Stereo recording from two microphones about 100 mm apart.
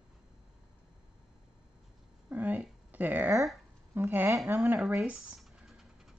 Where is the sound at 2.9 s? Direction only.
20° right (ahead or behind).